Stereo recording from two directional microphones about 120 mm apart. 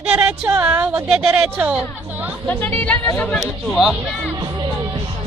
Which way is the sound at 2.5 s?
15° left (ahead or behind).